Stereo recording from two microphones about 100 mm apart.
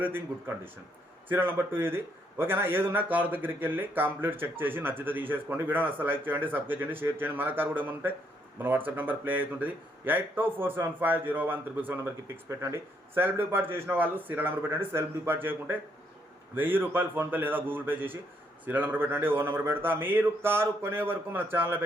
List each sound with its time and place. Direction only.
0.0 s speech: 20° right (ahead or behind)